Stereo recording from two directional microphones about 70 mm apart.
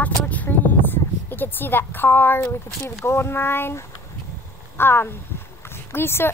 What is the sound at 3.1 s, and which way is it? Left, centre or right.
Speech, left.